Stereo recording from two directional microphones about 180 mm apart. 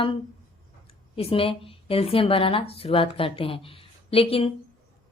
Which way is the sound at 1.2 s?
30° left (ahead or behind).